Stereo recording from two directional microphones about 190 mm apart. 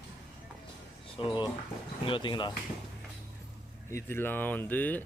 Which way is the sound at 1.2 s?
25° left (ahead or behind).